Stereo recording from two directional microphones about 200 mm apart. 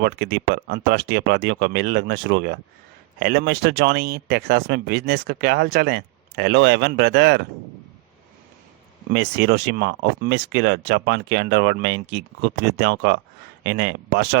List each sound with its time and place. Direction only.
0.0 s speech: 55° right (ahead or behind)
9.1 s speech: 55° right (ahead or behind)